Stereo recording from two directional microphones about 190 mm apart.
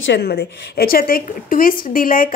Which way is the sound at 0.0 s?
65° left (ahead or behind).